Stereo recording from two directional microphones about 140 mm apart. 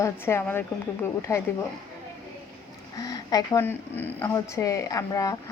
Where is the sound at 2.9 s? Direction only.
25° left (ahead or behind).